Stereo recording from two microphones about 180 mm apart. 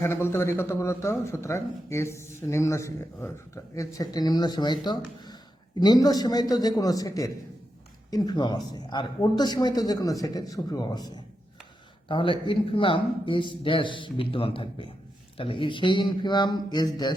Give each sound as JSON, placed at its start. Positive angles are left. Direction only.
{"t": 0.0, "sound": "a man's voice", "side_deg": 15}